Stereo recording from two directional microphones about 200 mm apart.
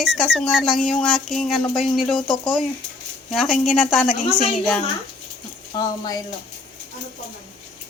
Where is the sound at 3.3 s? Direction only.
Centre (ahead or behind).